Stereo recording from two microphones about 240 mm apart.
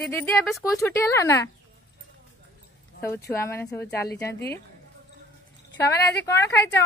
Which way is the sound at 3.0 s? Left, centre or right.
Centre.